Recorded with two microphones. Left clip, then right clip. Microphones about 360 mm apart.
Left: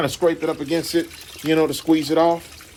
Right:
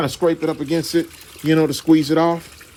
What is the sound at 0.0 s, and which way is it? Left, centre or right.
Speech, right.